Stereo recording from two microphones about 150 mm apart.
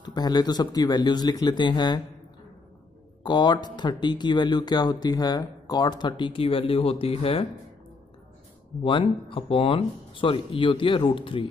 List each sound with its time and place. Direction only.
0.0 s speech: 30° left (ahead or behind)
3.3 s speech: 30° left (ahead or behind)
8.8 s speech: 35° left (ahead or behind)